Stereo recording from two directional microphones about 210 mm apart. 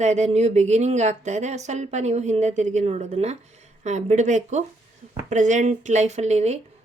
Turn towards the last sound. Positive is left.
turn(degrees=-30)  # may be behind; listen again after turning